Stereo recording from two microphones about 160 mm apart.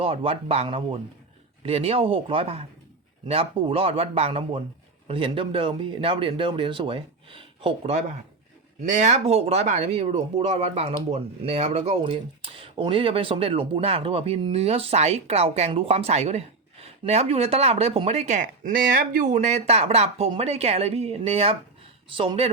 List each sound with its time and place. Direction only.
0.0 s speech: 35° right (ahead or behind)
8.8 s speech: 50° right (ahead or behind)